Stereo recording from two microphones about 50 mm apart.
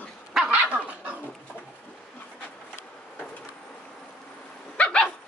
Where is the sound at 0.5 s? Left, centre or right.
Right.